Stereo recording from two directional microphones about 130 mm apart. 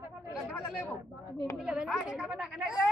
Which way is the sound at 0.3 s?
5° right (ahead or behind).